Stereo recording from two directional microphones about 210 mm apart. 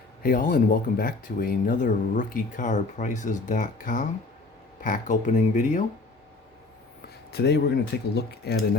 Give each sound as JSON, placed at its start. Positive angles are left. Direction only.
{"t": 0.2, "sound": "speech", "side_deg": 45}
{"t": 7.3, "sound": "speech", "side_deg": 50}